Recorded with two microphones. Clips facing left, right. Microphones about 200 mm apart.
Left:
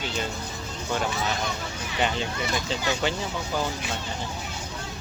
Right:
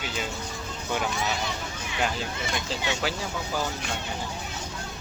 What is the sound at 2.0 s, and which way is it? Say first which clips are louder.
Speech: left 2 dB; centre (ahead or behind).